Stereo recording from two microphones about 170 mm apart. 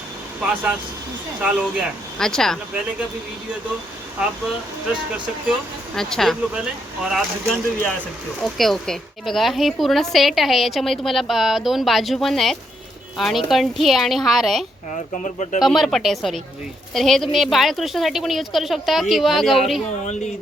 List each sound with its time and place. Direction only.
0.4 s a woman's voice: 10° right (ahead or behind)
5.1 s a woman's voice: centre (ahead or behind)
8.4 s a woman's voice: centre (ahead or behind)
14.9 s speech: 45° left (ahead or behind)
15.6 s a woman's voice: centre (ahead or behind)